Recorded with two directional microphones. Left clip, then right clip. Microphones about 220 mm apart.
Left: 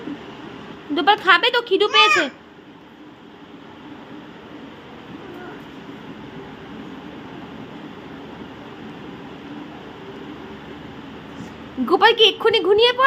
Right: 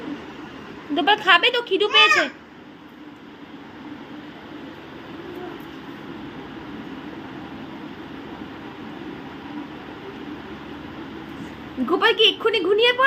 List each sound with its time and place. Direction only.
0.9 s a woman's voice: 15° left (ahead or behind)
11.9 s a woman's voice: 15° left (ahead or behind)